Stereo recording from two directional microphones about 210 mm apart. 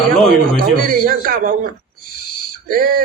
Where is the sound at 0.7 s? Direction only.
45° right (ahead or behind).